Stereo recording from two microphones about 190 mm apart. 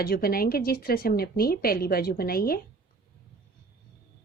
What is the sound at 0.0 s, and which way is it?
A woman's voice, 55° left (ahead or behind).